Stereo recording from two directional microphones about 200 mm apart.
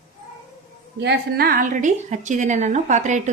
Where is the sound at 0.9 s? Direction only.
55° right (ahead or behind); by 3.3 s 35° right (ahead or behind).